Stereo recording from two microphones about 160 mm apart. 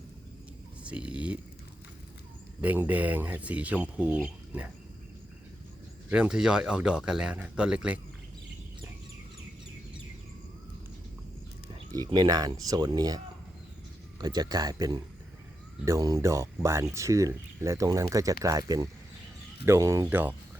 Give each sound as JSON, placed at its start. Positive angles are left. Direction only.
{"t": 0.9, "sound": "speech", "side_deg": -5}
{"t": 2.6, "sound": "speech", "side_deg": -10}
{"t": 6.1, "sound": "speech", "side_deg": -5}
{"t": 11.9, "sound": "speech", "side_deg": -25}